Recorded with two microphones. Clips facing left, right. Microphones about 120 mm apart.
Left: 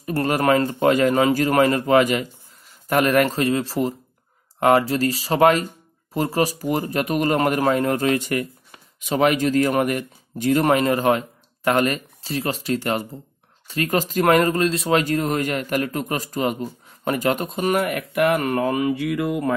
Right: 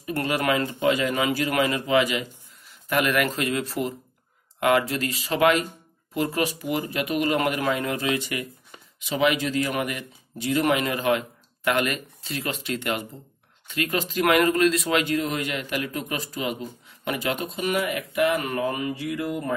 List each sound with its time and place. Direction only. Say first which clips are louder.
0.0 s speech: left 5 dB; 40° left (ahead or behind); by 19.5 s 75° left (ahead or behind)